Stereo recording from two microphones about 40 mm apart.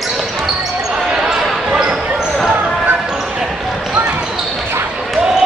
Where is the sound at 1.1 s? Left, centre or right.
Centre.